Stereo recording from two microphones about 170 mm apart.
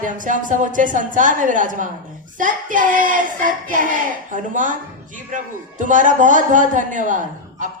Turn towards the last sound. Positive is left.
turn(degrees=-50)  # may be behind; listen again after turning